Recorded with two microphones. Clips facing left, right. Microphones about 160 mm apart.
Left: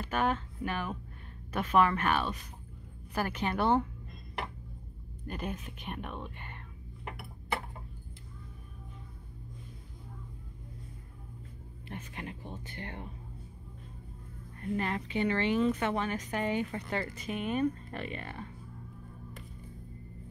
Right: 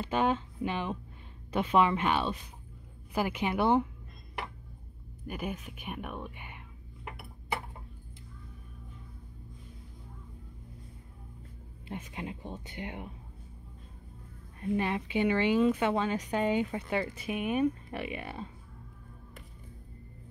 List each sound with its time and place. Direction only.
0.0 s a woman's voice: 20° right (ahead or behind)
5.2 s a woman's voice: 10° right (ahead or behind)
11.9 s a woman's voice: 15° right (ahead or behind)
14.6 s a woman's voice: 15° right (ahead or behind)